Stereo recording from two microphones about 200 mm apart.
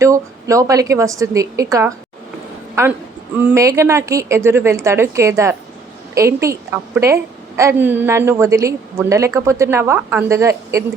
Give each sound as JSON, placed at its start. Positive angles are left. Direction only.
{"t": 0.0, "sound": "a woman's voice", "side_deg": -15}